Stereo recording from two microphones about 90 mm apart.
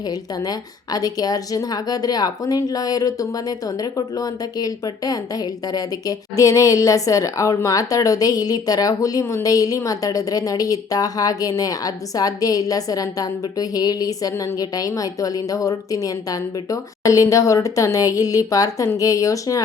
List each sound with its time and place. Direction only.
0.9 s speech: 45° left (ahead or behind)